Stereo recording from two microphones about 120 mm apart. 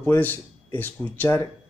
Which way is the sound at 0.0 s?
15° left (ahead or behind).